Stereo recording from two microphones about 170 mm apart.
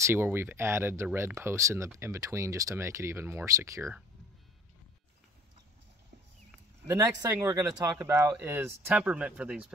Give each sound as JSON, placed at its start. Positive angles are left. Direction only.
{"t": 0.0, "sound": "speech", "side_deg": -15}
{"t": 6.9, "sound": "speech", "side_deg": -20}